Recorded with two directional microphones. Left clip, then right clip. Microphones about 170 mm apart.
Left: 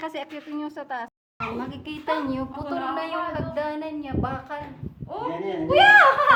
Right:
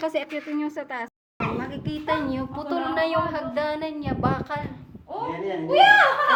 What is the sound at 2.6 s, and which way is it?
Speech, 15° right (ahead or behind).